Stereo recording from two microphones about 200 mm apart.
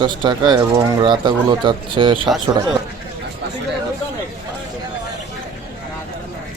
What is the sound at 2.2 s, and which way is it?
Speech, centre (ahead or behind).